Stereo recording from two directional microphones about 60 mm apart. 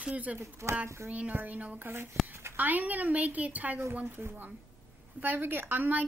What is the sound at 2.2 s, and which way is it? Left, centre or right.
Speech, centre.